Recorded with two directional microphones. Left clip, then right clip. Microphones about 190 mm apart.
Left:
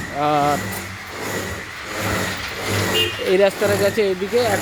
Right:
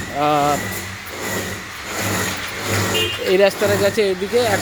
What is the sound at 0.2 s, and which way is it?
Speech, centre (ahead or behind).